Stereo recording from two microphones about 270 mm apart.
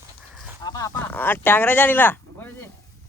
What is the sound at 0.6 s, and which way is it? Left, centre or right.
Speech, centre.